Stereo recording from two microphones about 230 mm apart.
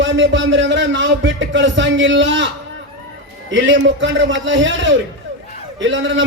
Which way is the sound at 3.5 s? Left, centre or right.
Right.